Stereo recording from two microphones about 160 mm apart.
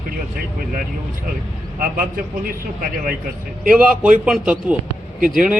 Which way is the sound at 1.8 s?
65° right (ahead or behind).